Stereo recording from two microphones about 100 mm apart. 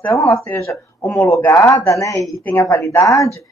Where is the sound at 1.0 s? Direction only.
15° left (ahead or behind).